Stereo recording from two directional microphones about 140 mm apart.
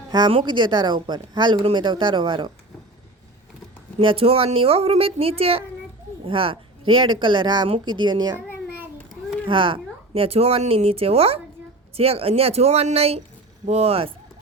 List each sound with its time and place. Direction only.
0.1 s speech: 35° right (ahead or behind)
4.0 s speech: 40° right (ahead or behind)
9.5 s speech: 35° right (ahead or behind)